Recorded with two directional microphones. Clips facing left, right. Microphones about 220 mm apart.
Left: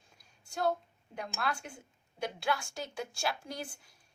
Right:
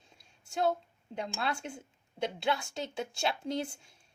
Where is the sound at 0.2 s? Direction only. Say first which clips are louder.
Right 3 dB; 20° right (ahead or behind).